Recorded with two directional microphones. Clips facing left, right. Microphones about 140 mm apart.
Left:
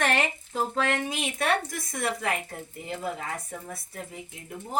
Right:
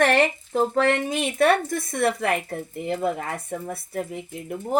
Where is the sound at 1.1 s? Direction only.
55° right (ahead or behind).